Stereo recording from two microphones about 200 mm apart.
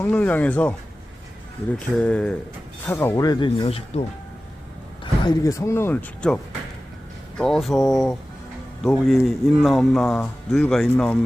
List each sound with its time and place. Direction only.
0.0 s speech: 10° left (ahead or behind)
2.0 s speech: 5° left (ahead or behind); by 4.0 s 30° left (ahead or behind)
5.2 s speech: 20° left (ahead or behind)